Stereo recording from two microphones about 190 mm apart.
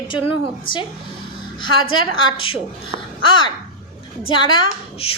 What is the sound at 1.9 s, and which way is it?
A woman's voice, 25° left (ahead or behind).